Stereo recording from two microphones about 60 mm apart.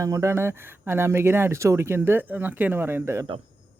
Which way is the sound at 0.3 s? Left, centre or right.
Right.